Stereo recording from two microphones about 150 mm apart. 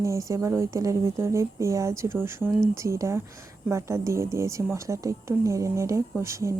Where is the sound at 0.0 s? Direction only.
20° right (ahead or behind).